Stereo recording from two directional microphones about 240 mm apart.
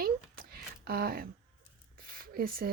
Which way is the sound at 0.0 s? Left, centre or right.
Right.